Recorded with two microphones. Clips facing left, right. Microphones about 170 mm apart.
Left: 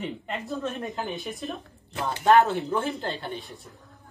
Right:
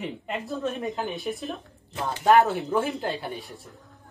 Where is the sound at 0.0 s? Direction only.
Centre (ahead or behind).